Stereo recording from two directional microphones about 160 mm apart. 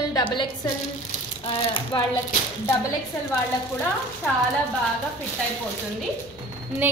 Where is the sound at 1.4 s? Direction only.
30° left (ahead or behind).